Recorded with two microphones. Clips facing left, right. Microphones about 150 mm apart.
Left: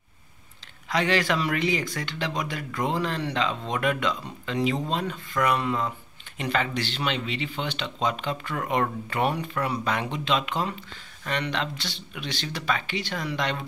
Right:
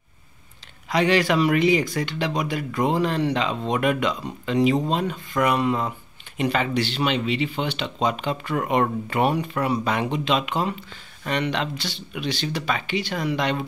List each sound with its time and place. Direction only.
0.8 s speech: 15° right (ahead or behind)